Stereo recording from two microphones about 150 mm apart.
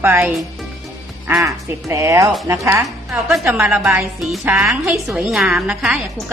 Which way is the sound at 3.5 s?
5° right (ahead or behind).